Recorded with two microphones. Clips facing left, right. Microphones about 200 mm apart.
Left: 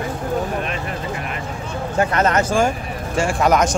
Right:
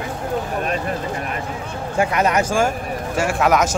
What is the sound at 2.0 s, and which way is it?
Speech, 10° right (ahead or behind).